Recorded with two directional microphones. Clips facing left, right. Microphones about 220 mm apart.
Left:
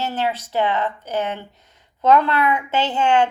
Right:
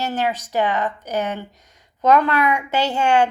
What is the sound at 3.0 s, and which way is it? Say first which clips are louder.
Speech: even; 40° right (ahead or behind).